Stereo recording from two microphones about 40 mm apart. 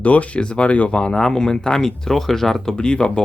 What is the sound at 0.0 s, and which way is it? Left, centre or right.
Speech, left.